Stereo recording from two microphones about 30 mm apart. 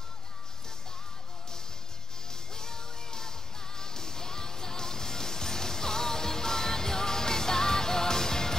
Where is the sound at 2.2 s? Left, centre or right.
Centre.